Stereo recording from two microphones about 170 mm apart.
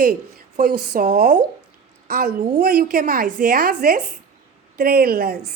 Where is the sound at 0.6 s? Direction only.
65° right (ahead or behind).